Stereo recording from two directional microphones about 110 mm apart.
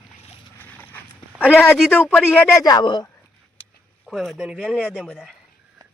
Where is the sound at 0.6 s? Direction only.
15° left (ahead or behind).